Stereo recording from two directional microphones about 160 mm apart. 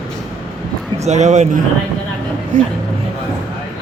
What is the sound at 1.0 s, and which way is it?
Speech, 45° right (ahead or behind).